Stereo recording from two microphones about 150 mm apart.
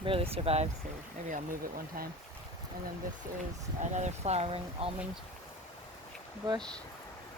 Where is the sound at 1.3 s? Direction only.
65° right (ahead or behind).